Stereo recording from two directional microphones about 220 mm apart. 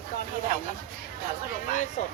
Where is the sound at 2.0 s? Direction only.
35° left (ahead or behind).